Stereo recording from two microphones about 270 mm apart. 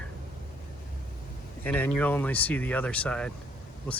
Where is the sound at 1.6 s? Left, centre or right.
Centre.